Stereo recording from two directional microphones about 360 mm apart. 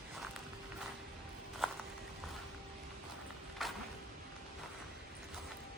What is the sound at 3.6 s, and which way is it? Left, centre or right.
Vehicle, centre.